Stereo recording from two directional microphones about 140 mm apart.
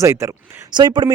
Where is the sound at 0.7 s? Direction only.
30° right (ahead or behind).